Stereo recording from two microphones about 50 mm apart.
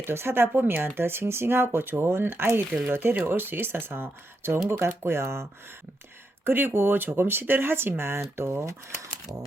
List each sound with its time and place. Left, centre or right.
0.1 s speech: right
6.4 s speech: right